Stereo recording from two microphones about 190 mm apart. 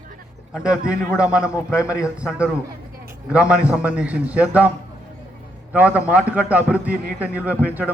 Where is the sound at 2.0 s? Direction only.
5° right (ahead or behind).